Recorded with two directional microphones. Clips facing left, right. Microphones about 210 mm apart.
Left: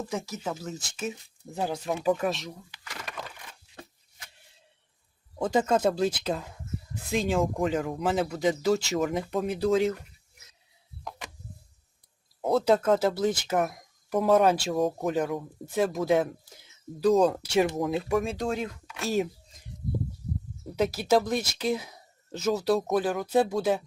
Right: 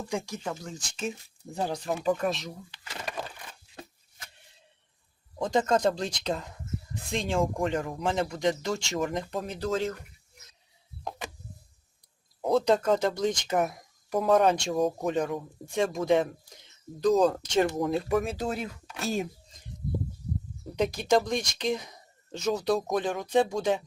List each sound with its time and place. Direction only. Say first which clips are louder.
0.1 s speech: even; 5° left (ahead or behind)
3.0 s a sound: right 4 dB; 30° right (ahead or behind)
5.4 s speech: left 1 dB; 5° left (ahead or behind)
12.4 s speech: left 1 dB; 5° left (ahead or behind)
20.7 s speech: left 1 dB; 5° left (ahead or behind)